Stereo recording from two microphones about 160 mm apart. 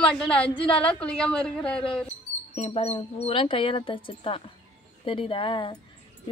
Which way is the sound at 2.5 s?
40° left (ahead or behind).